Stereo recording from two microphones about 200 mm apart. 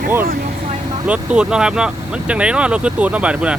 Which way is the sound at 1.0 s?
5° right (ahead or behind).